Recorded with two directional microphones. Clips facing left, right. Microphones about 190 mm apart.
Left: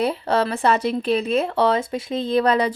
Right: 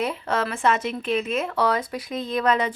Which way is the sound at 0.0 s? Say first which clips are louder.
Left 5 dB; 35° left (ahead or behind).